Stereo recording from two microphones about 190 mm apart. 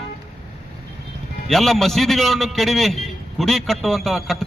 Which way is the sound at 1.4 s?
Centre (ahead or behind).